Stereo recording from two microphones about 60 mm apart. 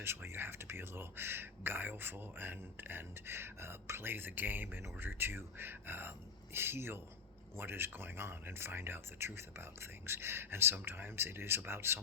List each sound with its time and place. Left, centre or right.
0.0 s speech: right